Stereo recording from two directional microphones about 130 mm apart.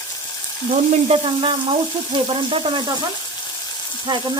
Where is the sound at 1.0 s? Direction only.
45° right (ahead or behind).